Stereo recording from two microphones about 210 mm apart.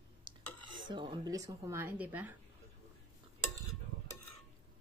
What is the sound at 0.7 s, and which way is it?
Speech, 20° right (ahead or behind).